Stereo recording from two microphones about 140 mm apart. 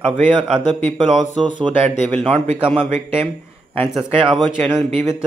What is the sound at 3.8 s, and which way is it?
Speech, 5° right (ahead or behind).